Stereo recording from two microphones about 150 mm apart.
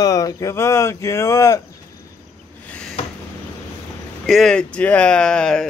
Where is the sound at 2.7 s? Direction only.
5° left (ahead or behind).